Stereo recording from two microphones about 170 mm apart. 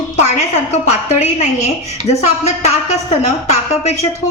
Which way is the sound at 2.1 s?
40° left (ahead or behind).